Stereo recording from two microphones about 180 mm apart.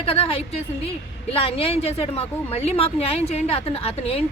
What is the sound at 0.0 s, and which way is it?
A woman's voice, 30° left (ahead or behind).